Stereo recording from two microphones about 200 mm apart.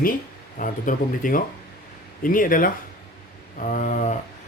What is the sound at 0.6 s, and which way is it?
Speech, 40° left (ahead or behind).